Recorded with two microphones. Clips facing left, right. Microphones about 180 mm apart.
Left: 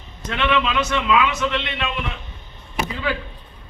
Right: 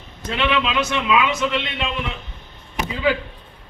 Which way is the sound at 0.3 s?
10° right (ahead or behind).